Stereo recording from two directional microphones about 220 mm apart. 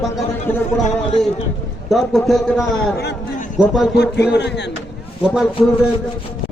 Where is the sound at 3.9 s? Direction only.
50° left (ahead or behind).